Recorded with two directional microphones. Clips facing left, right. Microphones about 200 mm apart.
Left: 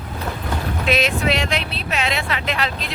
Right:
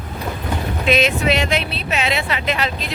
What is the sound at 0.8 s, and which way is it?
Speech, centre (ahead or behind).